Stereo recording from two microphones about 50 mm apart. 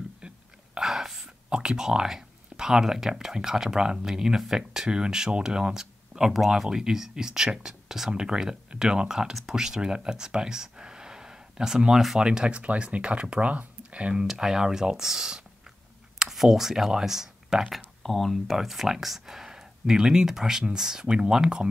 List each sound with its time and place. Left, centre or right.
0.2 s a sound: centre
0.7 s speech: centre
12.2 s speech: centre
14.2 s speech: centre
17.7 s speech: centre